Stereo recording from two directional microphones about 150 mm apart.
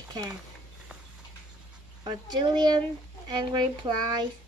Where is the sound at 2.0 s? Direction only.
30° right (ahead or behind).